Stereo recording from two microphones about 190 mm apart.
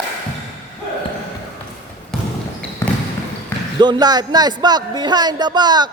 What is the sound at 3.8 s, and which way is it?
A man's voice, 20° right (ahead or behind).